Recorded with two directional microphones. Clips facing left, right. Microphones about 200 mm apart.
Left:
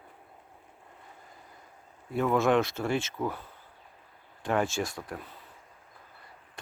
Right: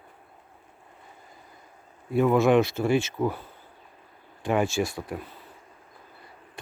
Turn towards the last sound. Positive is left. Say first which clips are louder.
# right 5 dB
turn(degrees=-5)  # may be behind; listen again after turning